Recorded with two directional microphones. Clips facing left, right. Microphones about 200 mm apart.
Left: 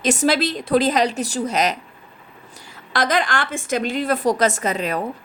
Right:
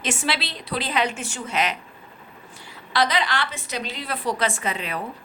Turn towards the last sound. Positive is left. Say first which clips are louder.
# left 6 dB
turn(degrees=45)  # may be behind; listen again after turning